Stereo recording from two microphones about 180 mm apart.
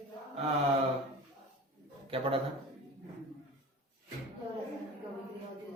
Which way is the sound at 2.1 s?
30° right (ahead or behind).